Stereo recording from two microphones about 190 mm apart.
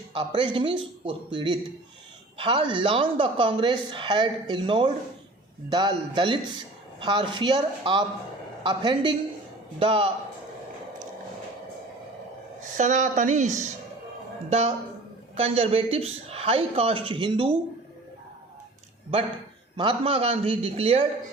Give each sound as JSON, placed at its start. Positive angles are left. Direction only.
{"t": 0.1, "sound": "a woman's voice", "side_deg": -25}
{"t": 12.7, "sound": "a man's voice", "side_deg": -40}
{"t": 15.4, "sound": "a man's voice", "side_deg": -30}
{"t": 19.7, "sound": "a man's voice", "side_deg": -25}